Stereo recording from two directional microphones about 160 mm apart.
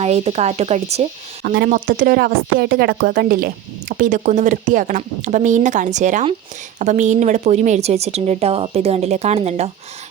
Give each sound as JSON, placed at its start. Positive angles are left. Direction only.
{"t": 0.0, "sound": "speech", "side_deg": -40}
{"t": 1.5, "sound": "speech", "side_deg": -70}